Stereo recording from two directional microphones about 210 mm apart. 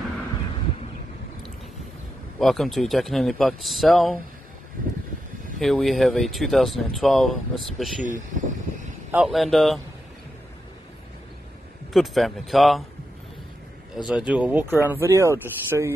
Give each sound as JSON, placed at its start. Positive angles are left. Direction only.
{"t": 2.3, "sound": "speech", "side_deg": 0}
{"t": 5.6, "sound": "speech", "side_deg": 0}
{"t": 8.0, "sound": "speech", "side_deg": -35}
{"t": 9.1, "sound": "speech", "side_deg": 0}
{"t": 11.9, "sound": "speech", "side_deg": 0}
{"t": 14.0, "sound": "speech", "side_deg": -5}